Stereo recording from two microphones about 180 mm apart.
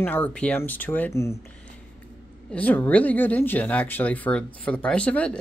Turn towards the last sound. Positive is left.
turn(degrees=5)  # may be behind; listen again after turning